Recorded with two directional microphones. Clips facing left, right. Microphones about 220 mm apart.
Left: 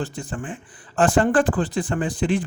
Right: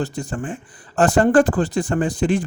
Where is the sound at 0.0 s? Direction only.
40° right (ahead or behind).